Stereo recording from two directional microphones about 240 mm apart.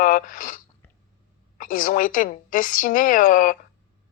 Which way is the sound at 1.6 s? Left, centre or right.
Left.